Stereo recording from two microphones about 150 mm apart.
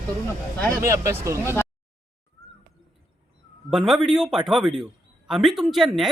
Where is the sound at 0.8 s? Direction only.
20° right (ahead or behind).